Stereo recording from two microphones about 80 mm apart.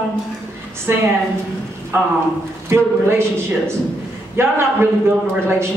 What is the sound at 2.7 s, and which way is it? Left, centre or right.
Speech, right.